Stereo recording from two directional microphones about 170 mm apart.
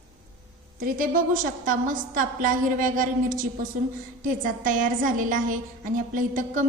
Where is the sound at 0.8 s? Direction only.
55° right (ahead or behind).